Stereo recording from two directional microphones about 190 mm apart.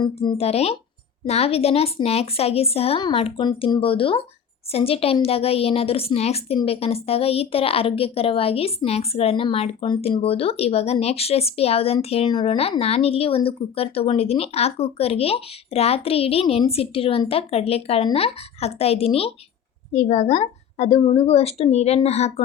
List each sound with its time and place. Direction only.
0.0 s a woman's voice: 30° left (ahead or behind)